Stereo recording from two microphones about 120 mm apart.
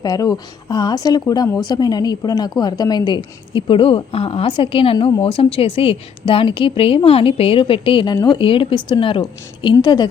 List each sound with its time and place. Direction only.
0.0 s a woman's voice: 30° left (ahead or behind)